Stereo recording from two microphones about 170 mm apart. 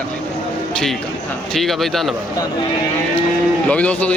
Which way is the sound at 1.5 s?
Centre (ahead or behind).